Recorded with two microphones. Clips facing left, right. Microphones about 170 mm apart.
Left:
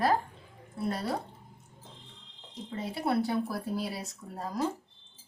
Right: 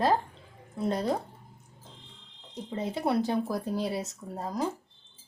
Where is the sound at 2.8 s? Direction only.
20° right (ahead or behind).